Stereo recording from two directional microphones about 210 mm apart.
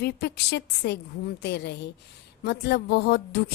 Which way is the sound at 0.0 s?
50° left (ahead or behind).